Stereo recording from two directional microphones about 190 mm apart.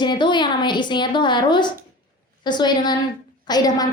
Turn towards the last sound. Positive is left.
turn(degrees=20)  # may be behind; listen again after turning